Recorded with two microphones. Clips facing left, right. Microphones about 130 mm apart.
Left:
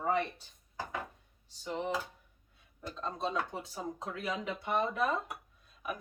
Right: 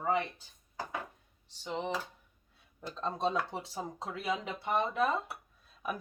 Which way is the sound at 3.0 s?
35° right (ahead or behind).